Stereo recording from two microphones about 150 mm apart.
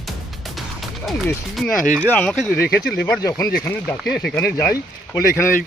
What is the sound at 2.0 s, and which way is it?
Speech, 10° left (ahead or behind).